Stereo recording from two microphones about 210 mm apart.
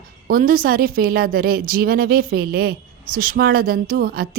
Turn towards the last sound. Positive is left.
turn(degrees=-45)  # may be behind; listen again after turning